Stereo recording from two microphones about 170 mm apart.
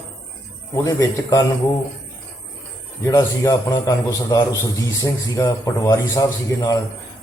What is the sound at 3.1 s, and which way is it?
A man's voice, 20° left (ahead or behind).